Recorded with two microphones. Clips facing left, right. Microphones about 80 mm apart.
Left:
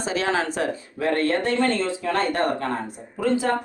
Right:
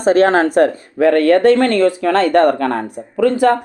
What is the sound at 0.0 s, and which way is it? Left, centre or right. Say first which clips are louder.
Speech: right 12 dB; right.